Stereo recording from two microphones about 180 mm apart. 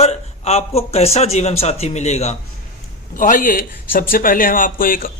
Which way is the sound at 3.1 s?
50° left (ahead or behind).